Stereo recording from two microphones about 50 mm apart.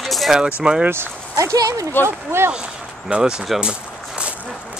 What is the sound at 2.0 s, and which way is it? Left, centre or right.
Speech, right.